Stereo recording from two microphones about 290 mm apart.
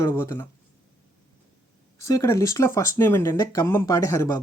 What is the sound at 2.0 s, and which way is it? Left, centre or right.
Speech, centre.